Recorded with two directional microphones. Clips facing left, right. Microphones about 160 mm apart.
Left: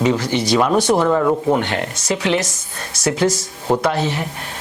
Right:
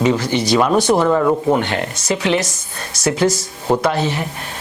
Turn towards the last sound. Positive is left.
turn(degrees=-10)  # may be behind; listen again after turning